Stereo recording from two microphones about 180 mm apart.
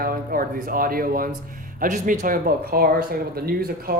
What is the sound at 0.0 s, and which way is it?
Speech, 55° right (ahead or behind).